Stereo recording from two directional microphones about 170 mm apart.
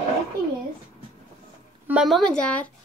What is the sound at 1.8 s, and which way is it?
Speech, 5° right (ahead or behind).